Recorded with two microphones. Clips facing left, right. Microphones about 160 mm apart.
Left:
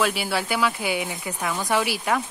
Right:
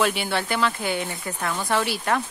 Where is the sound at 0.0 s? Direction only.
5° left (ahead or behind).